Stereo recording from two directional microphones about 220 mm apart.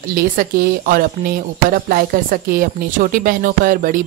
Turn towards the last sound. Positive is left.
turn(degrees=-40)  # may be behind; listen again after turning